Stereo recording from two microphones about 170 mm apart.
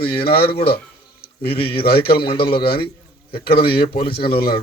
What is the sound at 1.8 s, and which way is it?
Speech, 65° left (ahead or behind).